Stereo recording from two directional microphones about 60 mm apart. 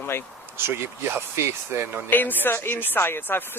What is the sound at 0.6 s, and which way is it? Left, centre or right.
Speech, right.